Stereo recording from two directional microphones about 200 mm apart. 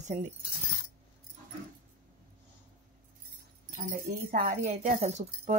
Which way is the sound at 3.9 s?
45° right (ahead or behind).